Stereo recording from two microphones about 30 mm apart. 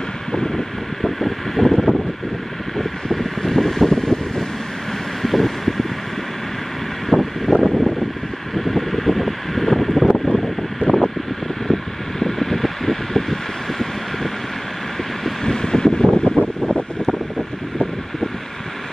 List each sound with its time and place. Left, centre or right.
0.3 s wind: left
1.0 s a sound: centre
2.8 s wind: centre
5.2 s vehicle: centre
7.1 s vehicle: centre
7.6 s a sound: centre
10.1 s vehicle: centre
11.6 s mechanical fan: centre
15.4 s vehicle: left